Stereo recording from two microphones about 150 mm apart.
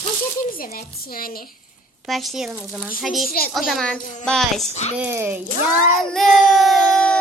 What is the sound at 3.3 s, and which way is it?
Speech, 90° left.